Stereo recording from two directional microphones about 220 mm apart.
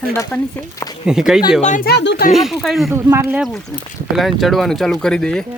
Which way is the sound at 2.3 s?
Centre (ahead or behind).